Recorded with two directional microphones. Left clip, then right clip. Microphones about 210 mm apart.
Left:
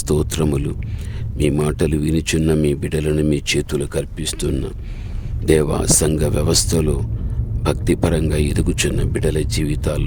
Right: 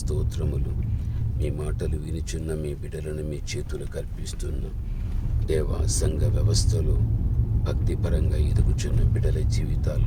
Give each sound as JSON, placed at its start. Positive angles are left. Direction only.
{"t": 0.1, "sound": "speech", "side_deg": 55}